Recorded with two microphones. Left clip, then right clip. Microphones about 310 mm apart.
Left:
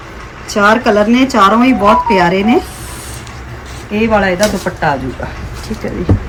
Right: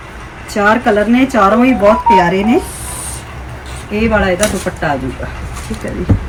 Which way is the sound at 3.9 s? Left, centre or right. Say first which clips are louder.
Left 1 dB; centre.